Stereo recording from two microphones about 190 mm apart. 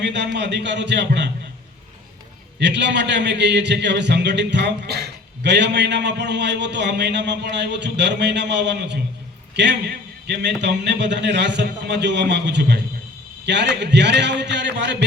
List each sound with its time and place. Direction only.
0.0 s a man's voice: 65° right (ahead or behind)
2.6 s a man's voice: 65° right (ahead or behind)
10.2 s a man's voice: 65° right (ahead or behind)